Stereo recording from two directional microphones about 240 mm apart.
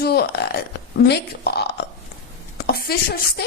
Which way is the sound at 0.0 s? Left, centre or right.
Left.